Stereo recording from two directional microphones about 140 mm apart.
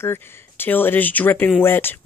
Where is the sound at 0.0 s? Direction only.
15° left (ahead or behind).